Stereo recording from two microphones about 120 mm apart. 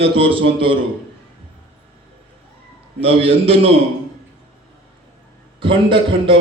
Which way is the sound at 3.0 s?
50° right (ahead or behind).